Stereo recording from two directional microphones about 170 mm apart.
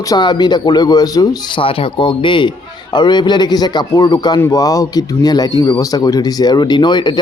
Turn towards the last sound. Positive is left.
turn(degrees=25)  # may be behind; listen again after turning